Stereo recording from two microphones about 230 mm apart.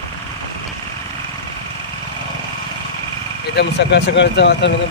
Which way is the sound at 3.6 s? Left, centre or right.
Left.